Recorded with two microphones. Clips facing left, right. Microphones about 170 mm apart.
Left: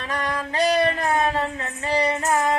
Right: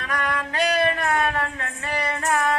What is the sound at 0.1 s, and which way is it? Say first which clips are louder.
Music: even; 30° left (ahead or behind).